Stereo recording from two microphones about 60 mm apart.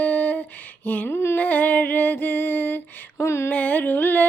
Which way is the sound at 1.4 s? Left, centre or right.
Left.